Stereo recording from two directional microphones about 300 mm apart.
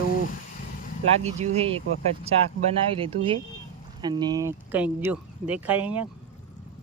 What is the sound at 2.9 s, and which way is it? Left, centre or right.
Speech, centre.